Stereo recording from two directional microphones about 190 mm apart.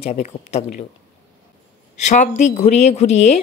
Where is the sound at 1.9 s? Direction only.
40° left (ahead or behind).